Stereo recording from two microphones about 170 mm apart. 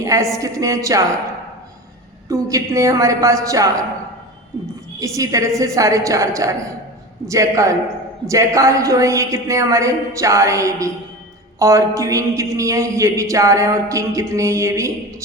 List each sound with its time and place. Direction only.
0.0 s a woman's voice: 20° right (ahead or behind)
2.3 s a woman's voice: 20° right (ahead or behind)
4.9 s a woman's voice: 20° right (ahead or behind)
7.3 s a sound: 20° right (ahead or behind)
8.3 s a woman's voice: 20° right (ahead or behind)
11.6 s a sound: 20° right (ahead or behind)